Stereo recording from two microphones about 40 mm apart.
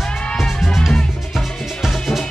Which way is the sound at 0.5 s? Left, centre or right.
Centre.